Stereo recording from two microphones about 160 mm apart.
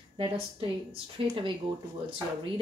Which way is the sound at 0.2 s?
35° right (ahead or behind).